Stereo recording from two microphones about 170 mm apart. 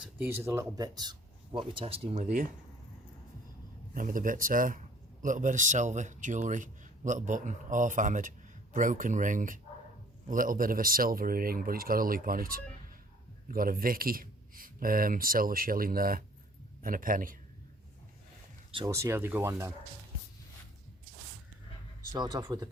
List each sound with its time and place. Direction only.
0.0 s speech: 10° right (ahead or behind); by 2.5 s 45° right (ahead or behind)
3.9 s speech: 55° right (ahead or behind)
18.9 s speech: 15° right (ahead or behind)
22.1 s speech: 25° right (ahead or behind)